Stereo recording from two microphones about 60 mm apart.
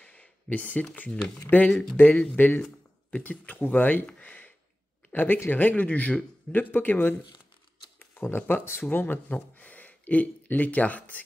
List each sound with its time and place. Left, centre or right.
0.0 s a sound: left
0.9 s speech: left
1.7 s speech: centre
2.0 s speech: left
8.0 s a sound: left
8.4 s speech: left